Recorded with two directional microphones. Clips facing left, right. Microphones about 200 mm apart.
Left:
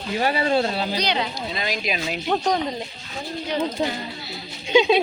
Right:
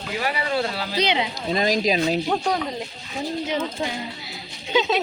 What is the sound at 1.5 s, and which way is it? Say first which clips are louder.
Speech: right 8 dB; 40° right (ahead or behind).